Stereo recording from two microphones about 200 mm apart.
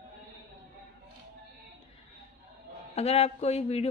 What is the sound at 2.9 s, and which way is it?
Speech, 30° left (ahead or behind).